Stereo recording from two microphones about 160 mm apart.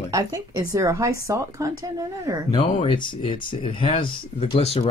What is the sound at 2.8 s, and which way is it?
Speech, 30° left (ahead or behind).